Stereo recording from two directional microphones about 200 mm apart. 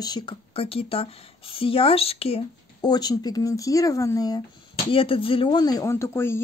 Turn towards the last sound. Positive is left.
turn(degrees=10)  # may be behind; listen again after turning